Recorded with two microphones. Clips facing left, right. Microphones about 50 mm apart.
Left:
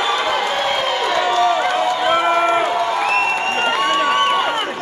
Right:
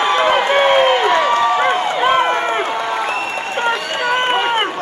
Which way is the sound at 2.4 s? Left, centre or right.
Centre.